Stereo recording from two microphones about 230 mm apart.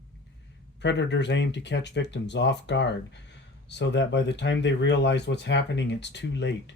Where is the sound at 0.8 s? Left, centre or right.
Left.